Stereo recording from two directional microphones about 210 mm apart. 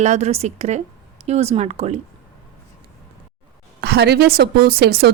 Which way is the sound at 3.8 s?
50° right (ahead or behind).